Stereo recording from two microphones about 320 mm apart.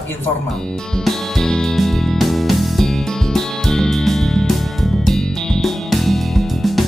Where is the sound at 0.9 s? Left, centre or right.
Centre.